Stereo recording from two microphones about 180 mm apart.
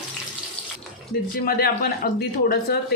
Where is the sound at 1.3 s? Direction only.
55° left (ahead or behind).